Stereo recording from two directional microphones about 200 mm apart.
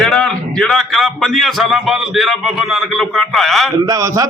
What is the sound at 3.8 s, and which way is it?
Speech, 15° right (ahead or behind).